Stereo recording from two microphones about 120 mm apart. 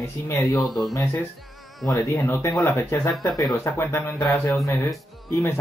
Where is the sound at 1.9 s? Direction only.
25° left (ahead or behind).